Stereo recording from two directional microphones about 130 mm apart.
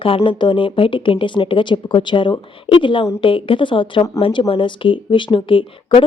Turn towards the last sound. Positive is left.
turn(degrees=40)  # may be behind; listen again after turning